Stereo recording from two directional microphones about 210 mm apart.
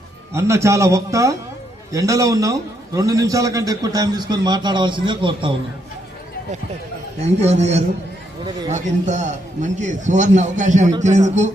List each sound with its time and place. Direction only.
0.3 s a man's voice: 15° right (ahead or behind)
7.2 s a man's voice: 30° right (ahead or behind)